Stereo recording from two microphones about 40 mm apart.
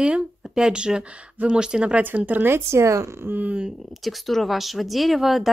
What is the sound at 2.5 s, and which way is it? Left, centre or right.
Speech, right.